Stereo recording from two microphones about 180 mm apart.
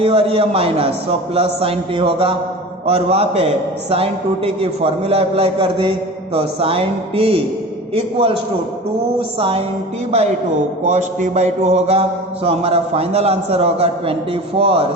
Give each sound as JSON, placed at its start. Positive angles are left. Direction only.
{"t": 0.0, "sound": "a man's voice", "side_deg": -30}
{"t": 9.4, "sound": "a man's voice", "side_deg": -30}
{"t": 10.8, "sound": "a man's voice", "side_deg": -40}